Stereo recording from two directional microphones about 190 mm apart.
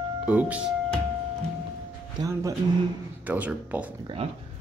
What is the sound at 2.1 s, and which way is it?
Speech, 15° right (ahead or behind).